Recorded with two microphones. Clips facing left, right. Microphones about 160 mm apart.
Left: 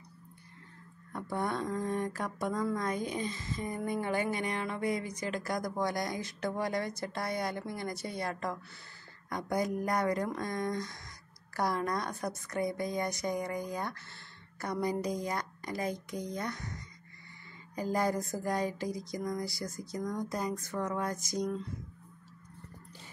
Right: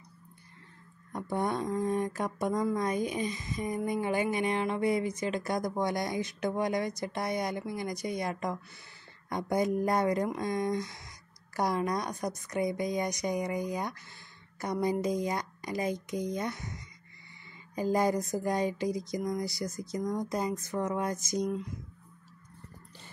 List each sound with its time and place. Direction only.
1.1 s a woman's voice: 20° right (ahead or behind)